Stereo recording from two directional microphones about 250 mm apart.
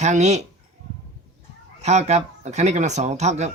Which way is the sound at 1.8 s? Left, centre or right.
Right.